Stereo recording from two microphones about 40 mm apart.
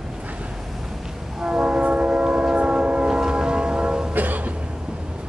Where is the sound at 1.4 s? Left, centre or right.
Right.